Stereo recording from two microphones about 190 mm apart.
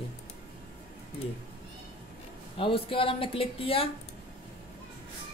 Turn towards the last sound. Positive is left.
turn(degrees=30)  # may be behind; listen again after turning